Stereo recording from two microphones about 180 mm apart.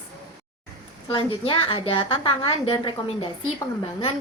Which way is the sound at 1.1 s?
30° left (ahead or behind).